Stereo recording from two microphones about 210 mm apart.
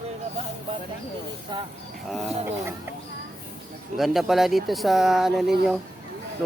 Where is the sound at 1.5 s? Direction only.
20° right (ahead or behind).